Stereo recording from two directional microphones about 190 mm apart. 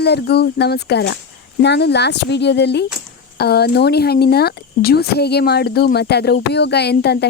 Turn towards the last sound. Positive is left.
turn(degrees=60)  # may be behind; listen again after turning